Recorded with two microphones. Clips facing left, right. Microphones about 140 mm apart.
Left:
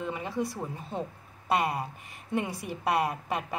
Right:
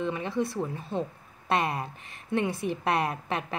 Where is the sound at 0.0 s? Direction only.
10° left (ahead or behind).